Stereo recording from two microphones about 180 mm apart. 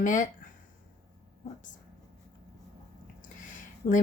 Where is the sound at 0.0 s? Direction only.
45° left (ahead or behind).